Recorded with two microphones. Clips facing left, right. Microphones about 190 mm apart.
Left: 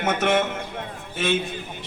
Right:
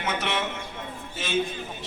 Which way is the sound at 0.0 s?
50° left (ahead or behind).